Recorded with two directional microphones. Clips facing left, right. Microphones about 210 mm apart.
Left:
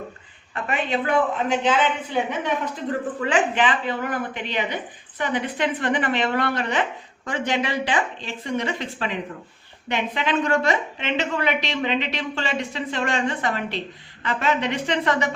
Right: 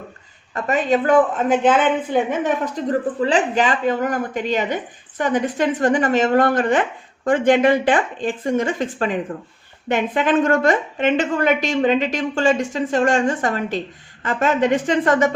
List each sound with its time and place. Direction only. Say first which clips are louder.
0.5 s a woman's voice: right 6 dB; 40° right (ahead or behind)
3.2 s a woman's voice: right 1 dB; 35° right (ahead or behind)